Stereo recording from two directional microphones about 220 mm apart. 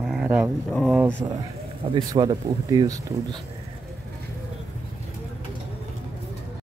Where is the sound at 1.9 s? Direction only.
20° right (ahead or behind).